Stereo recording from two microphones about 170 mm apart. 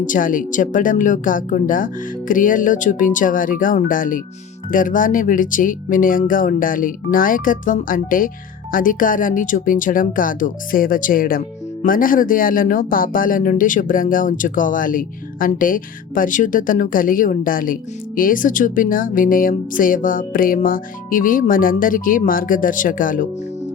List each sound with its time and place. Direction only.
0.0 s speech: 50° left (ahead or behind)